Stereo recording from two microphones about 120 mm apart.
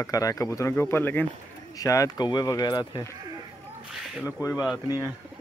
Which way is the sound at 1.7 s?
30° left (ahead or behind).